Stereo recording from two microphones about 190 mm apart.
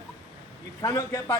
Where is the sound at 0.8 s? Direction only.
15° left (ahead or behind).